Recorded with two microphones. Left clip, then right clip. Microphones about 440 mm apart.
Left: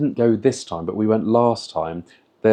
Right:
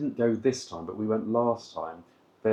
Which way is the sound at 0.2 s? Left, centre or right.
Left.